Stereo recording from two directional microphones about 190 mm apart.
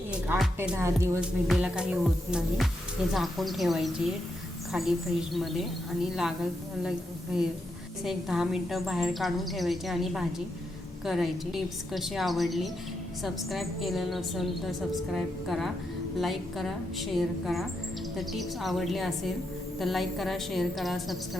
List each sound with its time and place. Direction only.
0.1 s speech: 5° right (ahead or behind)
1.5 s a woman's voice: 5° right (ahead or behind)